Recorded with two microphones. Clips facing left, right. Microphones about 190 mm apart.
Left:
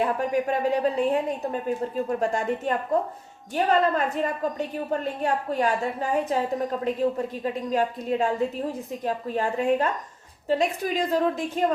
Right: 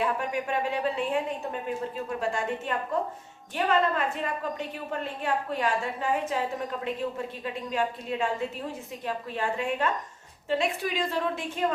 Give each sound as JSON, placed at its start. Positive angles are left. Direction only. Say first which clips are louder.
{"t": 0.0, "sound": "a woman's voice", "louder": "left 5 dB", "side_deg": 40}